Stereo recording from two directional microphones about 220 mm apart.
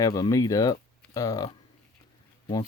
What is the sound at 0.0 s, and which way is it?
Speech, 15° left (ahead or behind).